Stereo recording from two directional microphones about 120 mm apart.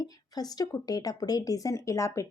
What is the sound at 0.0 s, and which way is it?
Speech, 30° left (ahead or behind).